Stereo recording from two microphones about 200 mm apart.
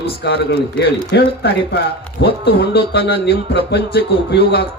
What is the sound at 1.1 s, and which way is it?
Speech, 60° left (ahead or behind).